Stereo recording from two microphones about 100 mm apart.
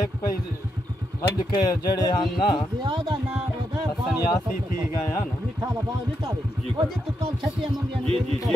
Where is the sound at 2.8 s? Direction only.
55° right (ahead or behind).